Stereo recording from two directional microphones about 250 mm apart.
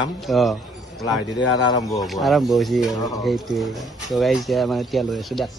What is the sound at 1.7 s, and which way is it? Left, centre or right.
Speech, centre.